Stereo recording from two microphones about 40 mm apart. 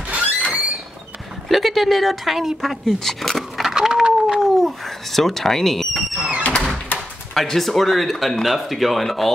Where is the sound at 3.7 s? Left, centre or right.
Centre.